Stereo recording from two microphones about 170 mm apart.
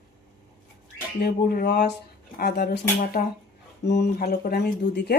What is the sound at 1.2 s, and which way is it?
Speech, 65° left (ahead or behind).